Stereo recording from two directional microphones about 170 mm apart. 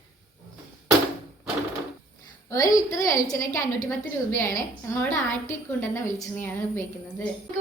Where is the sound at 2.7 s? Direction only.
20° left (ahead or behind).